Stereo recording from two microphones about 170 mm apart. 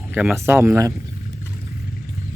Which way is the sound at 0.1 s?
10° right (ahead or behind).